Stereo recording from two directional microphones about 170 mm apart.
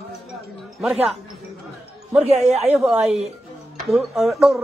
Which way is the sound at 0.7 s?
5° right (ahead or behind).